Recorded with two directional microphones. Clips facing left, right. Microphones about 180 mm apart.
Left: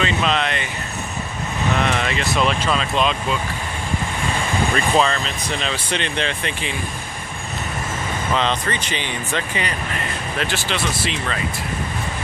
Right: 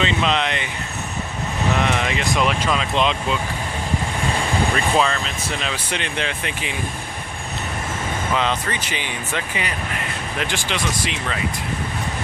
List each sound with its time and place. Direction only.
0.0 s speech: 20° right (ahead or behind)
1.8 s speech: 15° right (ahead or behind)
4.9 s speech: 5° right (ahead or behind)
8.4 s speech: 10° right (ahead or behind)